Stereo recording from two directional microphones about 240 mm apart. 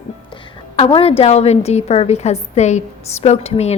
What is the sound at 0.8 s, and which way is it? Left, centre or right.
A woman's voice, left.